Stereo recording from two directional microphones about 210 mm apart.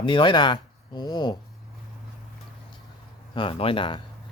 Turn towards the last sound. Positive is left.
turn(degrees=25)  # may be behind; listen again after turning